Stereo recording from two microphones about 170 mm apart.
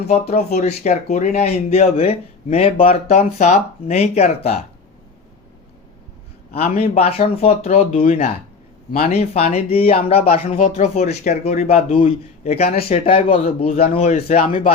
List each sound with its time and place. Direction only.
0.0 s speech: 40° left (ahead or behind)
6.8 s speech: 35° left (ahead or behind)